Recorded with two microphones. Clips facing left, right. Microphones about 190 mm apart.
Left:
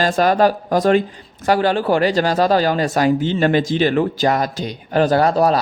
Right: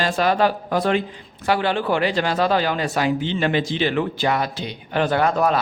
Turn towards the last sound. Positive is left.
turn(degrees=35)  # may be behind; listen again after turning